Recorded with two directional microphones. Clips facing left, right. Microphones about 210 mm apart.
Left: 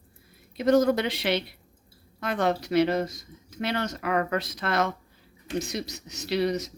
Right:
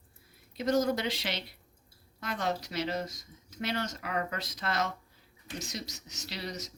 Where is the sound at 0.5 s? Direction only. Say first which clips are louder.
Left 7 dB; 60° left (ahead or behind).